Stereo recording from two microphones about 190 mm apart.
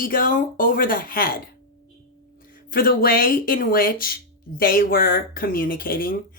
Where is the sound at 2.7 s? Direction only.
50° left (ahead or behind).